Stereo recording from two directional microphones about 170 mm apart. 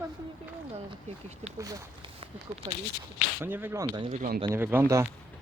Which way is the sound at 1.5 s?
20° right (ahead or behind).